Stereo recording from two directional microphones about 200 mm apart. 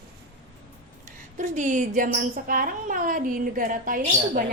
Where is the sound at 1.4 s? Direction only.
40° right (ahead or behind).